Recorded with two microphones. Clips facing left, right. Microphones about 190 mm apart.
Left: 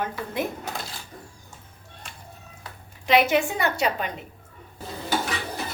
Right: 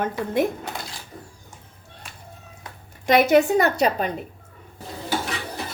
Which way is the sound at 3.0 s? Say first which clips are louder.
Right 4 dB; 45° right (ahead or behind).